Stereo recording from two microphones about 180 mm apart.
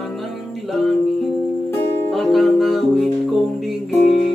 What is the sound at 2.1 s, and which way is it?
Music, centre (ahead or behind).